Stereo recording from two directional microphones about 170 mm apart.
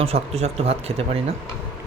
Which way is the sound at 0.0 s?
35° right (ahead or behind).